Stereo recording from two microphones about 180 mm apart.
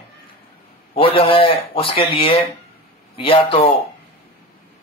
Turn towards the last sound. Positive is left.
turn(degrees=30)  # may be behind; listen again after turning